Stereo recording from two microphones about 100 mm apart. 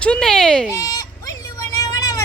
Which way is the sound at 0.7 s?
35° left (ahead or behind).